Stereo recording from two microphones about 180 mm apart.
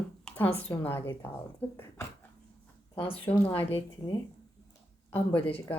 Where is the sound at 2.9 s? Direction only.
30° left (ahead or behind).